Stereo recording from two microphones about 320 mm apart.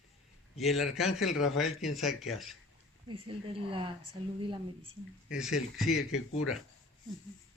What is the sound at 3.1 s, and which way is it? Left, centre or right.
Speech, centre.